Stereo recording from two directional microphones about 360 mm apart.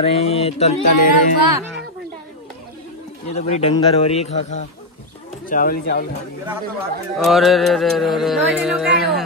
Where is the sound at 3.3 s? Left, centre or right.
Centre.